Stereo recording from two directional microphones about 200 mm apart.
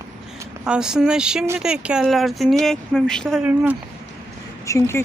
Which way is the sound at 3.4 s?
10° right (ahead or behind).